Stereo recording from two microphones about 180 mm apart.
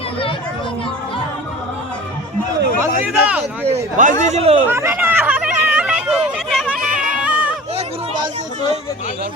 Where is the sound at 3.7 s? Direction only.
45° right (ahead or behind).